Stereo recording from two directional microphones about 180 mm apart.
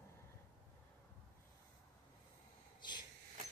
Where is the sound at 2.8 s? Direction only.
25° left (ahead or behind).